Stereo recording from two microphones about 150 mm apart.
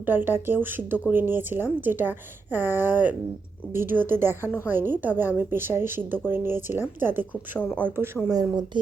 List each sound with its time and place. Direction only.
0.0 s a woman's voice: 15° right (ahead or behind)